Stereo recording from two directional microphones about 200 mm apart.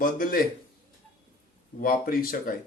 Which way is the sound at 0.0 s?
45° left (ahead or behind).